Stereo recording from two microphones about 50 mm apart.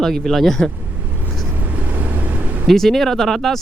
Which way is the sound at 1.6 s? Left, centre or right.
Right.